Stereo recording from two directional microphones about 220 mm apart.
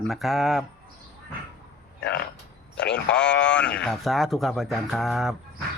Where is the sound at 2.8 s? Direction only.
50° left (ahead or behind).